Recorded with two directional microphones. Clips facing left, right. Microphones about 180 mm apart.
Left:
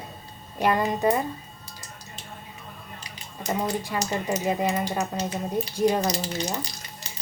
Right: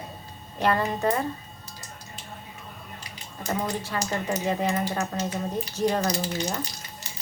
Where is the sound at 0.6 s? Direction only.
15° left (ahead or behind).